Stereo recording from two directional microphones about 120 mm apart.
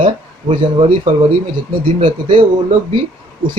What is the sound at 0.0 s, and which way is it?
Speech, 45° right (ahead or behind).